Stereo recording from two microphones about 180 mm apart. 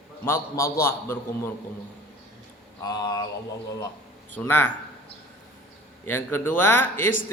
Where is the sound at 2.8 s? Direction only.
25° left (ahead or behind).